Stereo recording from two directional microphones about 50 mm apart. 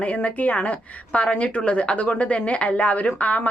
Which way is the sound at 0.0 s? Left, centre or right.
Left.